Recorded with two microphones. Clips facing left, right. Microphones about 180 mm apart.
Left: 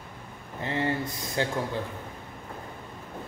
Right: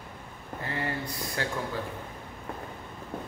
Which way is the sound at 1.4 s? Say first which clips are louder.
Left 5 dB; 25° left (ahead or behind).